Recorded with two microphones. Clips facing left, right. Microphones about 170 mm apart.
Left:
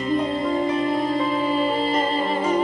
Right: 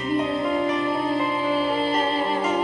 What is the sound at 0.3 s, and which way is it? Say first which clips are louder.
Music: left 1 dB; 30° left (ahead or behind).